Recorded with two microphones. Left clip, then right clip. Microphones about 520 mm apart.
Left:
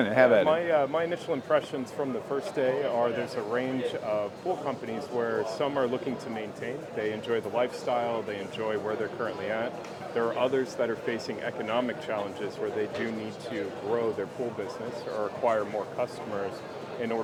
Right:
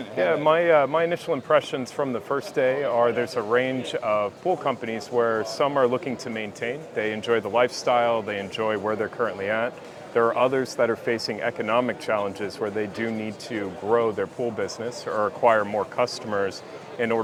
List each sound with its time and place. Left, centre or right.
0.4 s speech: right